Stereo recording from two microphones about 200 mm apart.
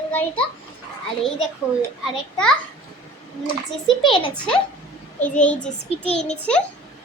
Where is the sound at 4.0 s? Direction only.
25° left (ahead or behind).